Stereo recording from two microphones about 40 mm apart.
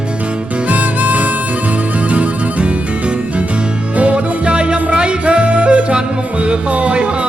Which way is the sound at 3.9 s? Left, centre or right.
Right.